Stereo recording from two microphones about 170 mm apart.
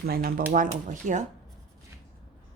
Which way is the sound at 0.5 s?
50° right (ahead or behind).